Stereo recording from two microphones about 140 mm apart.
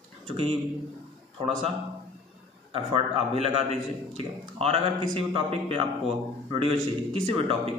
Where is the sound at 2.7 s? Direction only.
40° right (ahead or behind).